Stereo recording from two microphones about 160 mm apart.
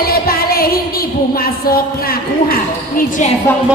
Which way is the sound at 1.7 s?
70° left (ahead or behind).